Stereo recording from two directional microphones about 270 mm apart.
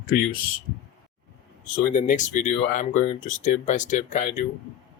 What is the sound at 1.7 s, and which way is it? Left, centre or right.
Speech, left.